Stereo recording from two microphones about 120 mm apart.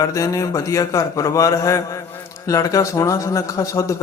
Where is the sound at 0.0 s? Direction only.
25° left (ahead or behind).